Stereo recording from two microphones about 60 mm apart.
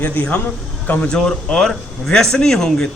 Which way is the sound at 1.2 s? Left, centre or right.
Centre.